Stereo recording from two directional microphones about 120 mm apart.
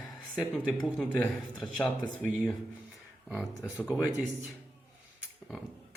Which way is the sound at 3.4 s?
20° left (ahead or behind).